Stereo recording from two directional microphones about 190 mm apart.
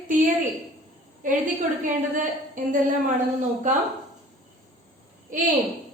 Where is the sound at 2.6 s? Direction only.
45° right (ahead or behind).